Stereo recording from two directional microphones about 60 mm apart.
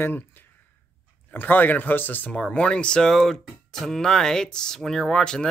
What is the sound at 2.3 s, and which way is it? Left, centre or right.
Speech, centre.